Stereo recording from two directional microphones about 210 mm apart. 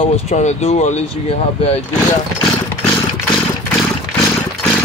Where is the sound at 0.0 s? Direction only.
30° left (ahead or behind).